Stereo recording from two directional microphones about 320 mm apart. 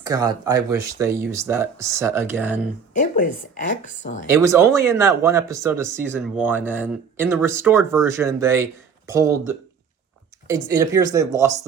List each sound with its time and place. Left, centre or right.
0.0 s speech: centre
2.9 s speech: left
4.3 s speech: centre